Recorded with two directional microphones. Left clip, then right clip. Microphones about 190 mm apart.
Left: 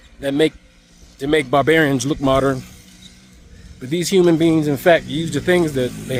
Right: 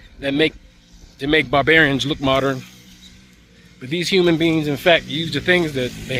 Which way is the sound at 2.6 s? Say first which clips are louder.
Left 1 dB; 90° left.